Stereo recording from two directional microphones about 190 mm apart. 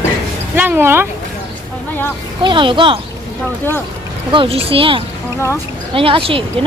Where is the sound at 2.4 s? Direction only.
25° right (ahead or behind).